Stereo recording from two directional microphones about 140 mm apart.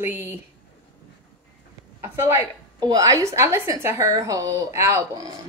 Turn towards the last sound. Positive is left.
turn(degrees=-20)  # may be behind; listen again after turning